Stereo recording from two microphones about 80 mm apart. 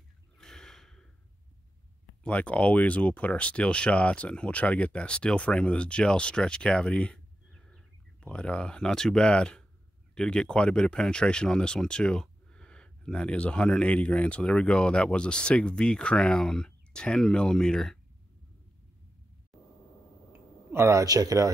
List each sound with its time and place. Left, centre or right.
0.4 s snort: centre
2.2 s speech: centre
19.5 s vehicle: centre
20.3 s speech: right